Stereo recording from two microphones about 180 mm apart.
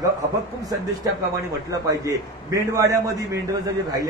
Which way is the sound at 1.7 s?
20° right (ahead or behind).